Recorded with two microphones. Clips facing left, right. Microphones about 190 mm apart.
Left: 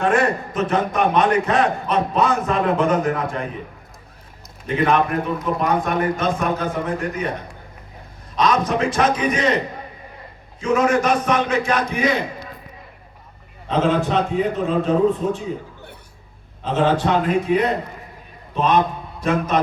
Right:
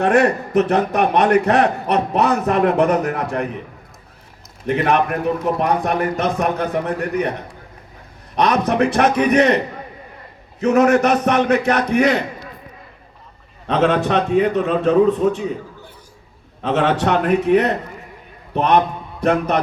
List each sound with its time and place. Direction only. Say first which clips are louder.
0.0 s a man's voice: right 3 dB; 65° right (ahead or behind)
4.6 s a man's voice: right 1 dB; 65° right (ahead or behind)
8.4 s a man's voice: right 3 dB; 65° right (ahead or behind)
10.6 s a man's voice: right 4 dB; 65° right (ahead or behind)
13.7 s a man's voice: right 2 dB; 70° right (ahead or behind)
16.6 s a man's voice: right 1 dB; 70° right (ahead or behind)